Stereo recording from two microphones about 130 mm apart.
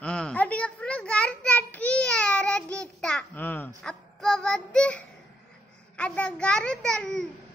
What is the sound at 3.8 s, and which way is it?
Child singing, 5° left (ahead or behind).